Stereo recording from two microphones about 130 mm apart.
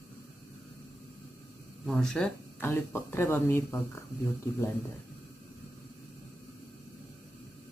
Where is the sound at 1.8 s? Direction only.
5° left (ahead or behind).